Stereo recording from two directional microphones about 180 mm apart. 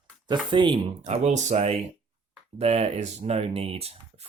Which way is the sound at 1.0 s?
40° right (ahead or behind).